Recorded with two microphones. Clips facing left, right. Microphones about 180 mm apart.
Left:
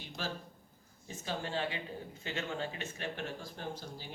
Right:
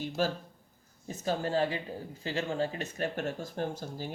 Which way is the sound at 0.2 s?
45° right (ahead or behind).